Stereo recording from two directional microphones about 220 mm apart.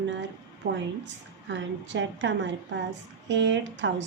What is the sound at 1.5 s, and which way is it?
Speech, 55° right (ahead or behind).